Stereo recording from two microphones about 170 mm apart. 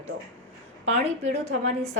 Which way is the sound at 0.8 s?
40° right (ahead or behind).